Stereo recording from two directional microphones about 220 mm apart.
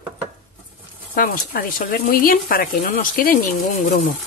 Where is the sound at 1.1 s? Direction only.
40° left (ahead or behind).